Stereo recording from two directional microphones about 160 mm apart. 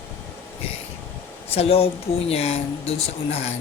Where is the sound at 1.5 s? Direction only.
35° left (ahead or behind).